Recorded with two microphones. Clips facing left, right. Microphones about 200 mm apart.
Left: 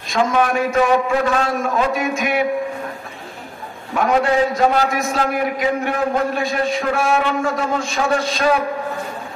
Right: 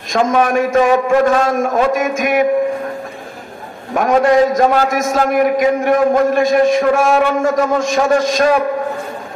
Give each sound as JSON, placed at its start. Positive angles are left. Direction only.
{"t": 0.1, "sound": "a man's voice", "side_deg": -45}
{"t": 3.9, "sound": "a man's voice", "side_deg": -45}